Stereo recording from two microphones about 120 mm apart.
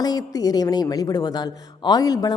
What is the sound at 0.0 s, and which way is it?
A woman's voice, 30° left (ahead or behind).